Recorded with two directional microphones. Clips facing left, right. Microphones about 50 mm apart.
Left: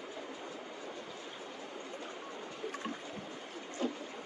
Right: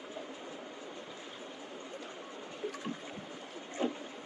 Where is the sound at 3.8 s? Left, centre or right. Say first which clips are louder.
Right 2 dB; right.